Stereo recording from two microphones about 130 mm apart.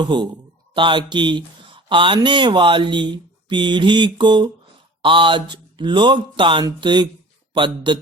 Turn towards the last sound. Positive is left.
turn(degrees=-40)  # may be behind; listen again after turning